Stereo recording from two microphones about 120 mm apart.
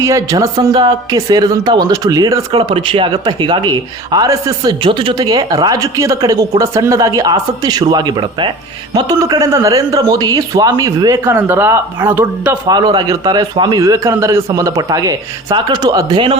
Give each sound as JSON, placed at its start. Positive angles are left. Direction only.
{"t": 0.0, "sound": "a man's voice", "side_deg": -25}
{"t": 2.5, "sound": "a man's voice", "side_deg": -45}
{"t": 4.8, "sound": "a woman's voice", "side_deg": -45}
{"t": 5.2, "sound": "a man's voice", "side_deg": -30}
{"t": 12.6, "sound": "a man's voice", "side_deg": -35}